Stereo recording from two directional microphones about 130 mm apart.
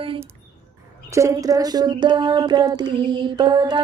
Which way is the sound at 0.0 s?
45° right (ahead or behind).